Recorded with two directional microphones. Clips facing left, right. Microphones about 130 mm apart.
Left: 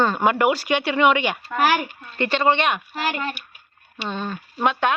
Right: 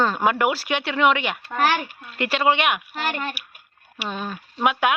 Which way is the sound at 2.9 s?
5° left (ahead or behind).